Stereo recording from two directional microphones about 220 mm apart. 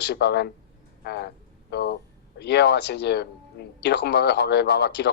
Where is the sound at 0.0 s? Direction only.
50° left (ahead or behind).